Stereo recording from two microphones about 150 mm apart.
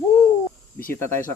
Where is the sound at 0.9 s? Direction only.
15° left (ahead or behind).